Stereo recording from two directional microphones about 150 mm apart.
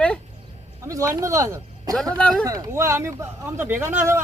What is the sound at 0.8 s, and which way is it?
Speech, 20° right (ahead or behind).